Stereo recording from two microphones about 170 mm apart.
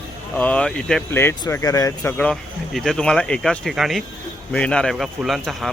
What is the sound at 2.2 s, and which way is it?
Speech, 5° left (ahead or behind).